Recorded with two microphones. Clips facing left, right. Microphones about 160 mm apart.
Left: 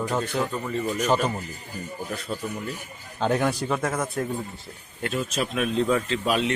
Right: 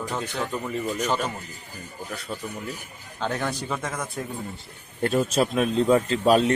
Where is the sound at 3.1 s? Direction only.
15° left (ahead or behind).